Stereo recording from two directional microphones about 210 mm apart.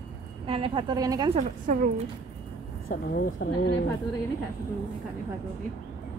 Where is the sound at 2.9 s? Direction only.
45° left (ahead or behind).